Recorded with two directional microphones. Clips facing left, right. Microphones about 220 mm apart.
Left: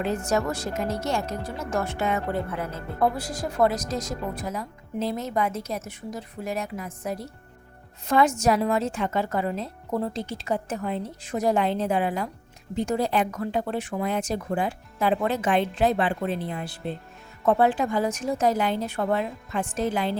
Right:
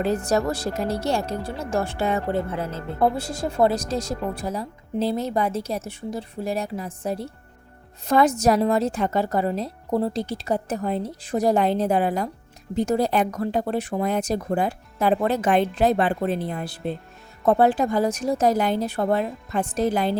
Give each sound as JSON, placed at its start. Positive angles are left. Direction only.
{"t": 0.0, "sound": "speech", "side_deg": -35}